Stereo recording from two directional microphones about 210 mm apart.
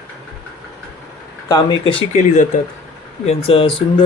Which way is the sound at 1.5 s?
25° left (ahead or behind).